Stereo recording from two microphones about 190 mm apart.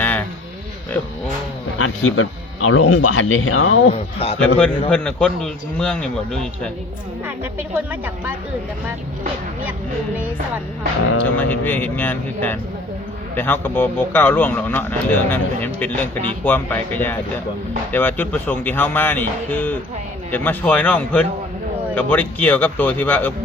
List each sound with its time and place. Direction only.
0.0 s a sound: 10° left (ahead or behind)
1.8 s speech: 90° left
3.9 s a man's voice: 30° left (ahead or behind)
4.4 s a man's voice: 5° left (ahead or behind)
11.3 s a man's voice: 10° left (ahead or behind)